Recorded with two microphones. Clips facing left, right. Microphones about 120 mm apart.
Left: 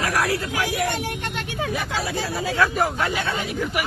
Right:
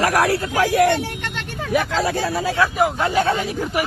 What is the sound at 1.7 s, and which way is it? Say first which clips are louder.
Speech: right 11 dB; 65° right (ahead or behind).